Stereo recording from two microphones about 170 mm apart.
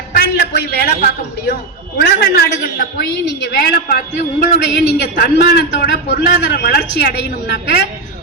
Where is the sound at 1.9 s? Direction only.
65° left (ahead or behind).